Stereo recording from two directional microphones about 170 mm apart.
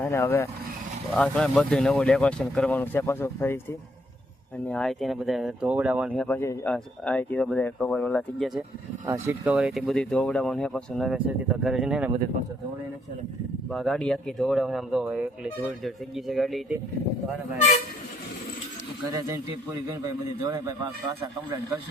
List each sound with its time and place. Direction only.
0.0 s speech: 15° left (ahead or behind)
1.1 s speech: 5° left (ahead or behind)
6.1 s speech: 10° left (ahead or behind)
9.0 s speech: 15° right (ahead or behind)
13.7 s speech: centre (ahead or behind)
19.9 s a man's voice: 25° right (ahead or behind)